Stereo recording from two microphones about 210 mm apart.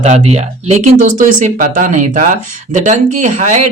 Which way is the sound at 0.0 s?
30° right (ahead or behind).